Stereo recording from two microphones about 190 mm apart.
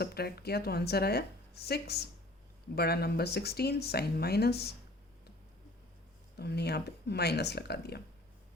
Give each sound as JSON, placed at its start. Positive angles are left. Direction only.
{"t": 0.0, "sound": "speech", "side_deg": 55}
{"t": 6.3, "sound": "speech", "side_deg": 60}